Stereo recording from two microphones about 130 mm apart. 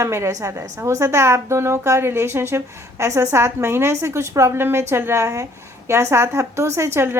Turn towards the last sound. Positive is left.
turn(degrees=-20)  # may be behind; listen again after turning